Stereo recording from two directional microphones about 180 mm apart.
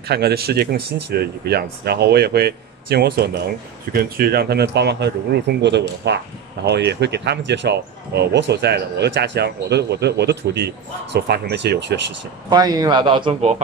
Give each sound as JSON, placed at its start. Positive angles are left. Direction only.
{"t": 0.1, "sound": "speech", "side_deg": -60}
{"t": 12.4, "sound": "a man's voice", "side_deg": -20}